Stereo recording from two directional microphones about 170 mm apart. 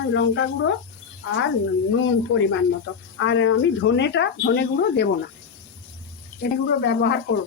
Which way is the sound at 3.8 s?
90° left.